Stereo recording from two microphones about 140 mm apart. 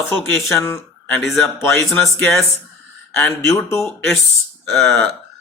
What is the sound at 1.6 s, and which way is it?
Speech, 20° left (ahead or behind).